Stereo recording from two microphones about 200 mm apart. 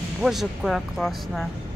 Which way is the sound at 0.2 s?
Centre (ahead or behind).